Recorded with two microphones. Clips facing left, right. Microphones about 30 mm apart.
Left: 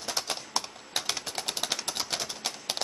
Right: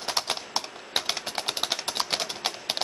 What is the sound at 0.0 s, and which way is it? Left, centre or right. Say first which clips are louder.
Typing: right 4 dB; right.